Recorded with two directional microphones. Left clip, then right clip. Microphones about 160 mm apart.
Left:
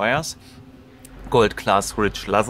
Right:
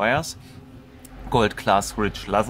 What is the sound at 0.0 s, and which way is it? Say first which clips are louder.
Speech: left 1 dB; 20° left (ahead or behind).